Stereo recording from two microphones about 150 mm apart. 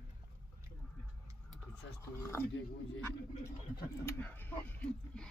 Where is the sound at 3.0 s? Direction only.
20° left (ahead or behind).